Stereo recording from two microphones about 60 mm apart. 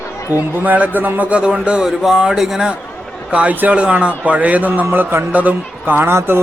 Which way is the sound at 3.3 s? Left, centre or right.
Right.